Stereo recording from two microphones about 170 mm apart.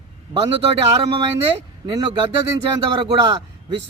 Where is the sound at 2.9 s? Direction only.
30° right (ahead or behind).